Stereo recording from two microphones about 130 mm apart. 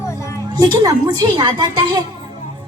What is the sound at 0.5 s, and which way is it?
A woman's voice, 35° right (ahead or behind).